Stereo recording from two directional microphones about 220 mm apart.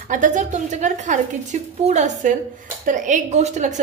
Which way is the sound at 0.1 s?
35° right (ahead or behind).